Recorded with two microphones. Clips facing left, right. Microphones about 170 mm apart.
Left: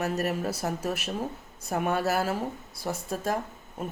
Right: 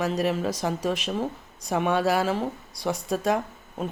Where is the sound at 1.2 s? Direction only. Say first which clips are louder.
Right 4 dB; 5° left (ahead or behind).